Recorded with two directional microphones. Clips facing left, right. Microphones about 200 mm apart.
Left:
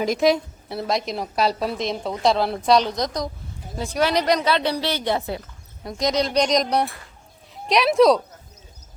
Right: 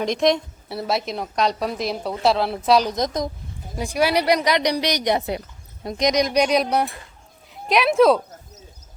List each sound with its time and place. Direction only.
0.0 s a woman's voice: 5° left (ahead or behind)
2.9 s a woman's voice: 20° right (ahead or behind)
3.8 s a woman's voice: 10° right (ahead or behind)